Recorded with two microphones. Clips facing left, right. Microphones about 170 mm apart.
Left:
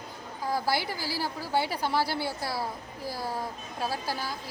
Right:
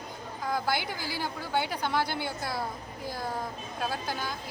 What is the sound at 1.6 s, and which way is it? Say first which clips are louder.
Speech: left 2 dB; 5° left (ahead or behind).